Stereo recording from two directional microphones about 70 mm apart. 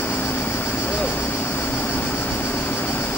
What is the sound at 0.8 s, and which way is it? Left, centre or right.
Vehicle, left.